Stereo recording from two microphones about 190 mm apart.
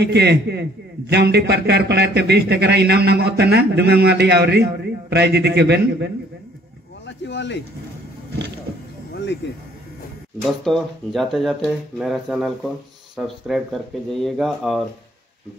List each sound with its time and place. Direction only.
0.0 s a man's voice: 60° right (ahead or behind)
7.1 s speech: 70° left (ahead or behind)
9.1 s a sound: 65° left (ahead or behind)
10.4 s speech: centre (ahead or behind)